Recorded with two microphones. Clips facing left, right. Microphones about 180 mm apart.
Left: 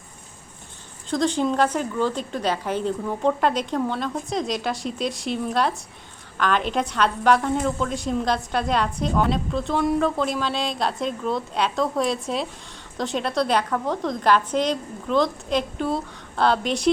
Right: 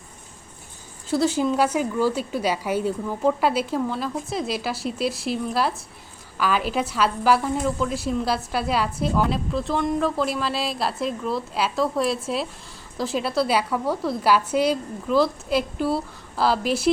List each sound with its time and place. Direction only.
1.1 s a woman's voice: 5° right (ahead or behind)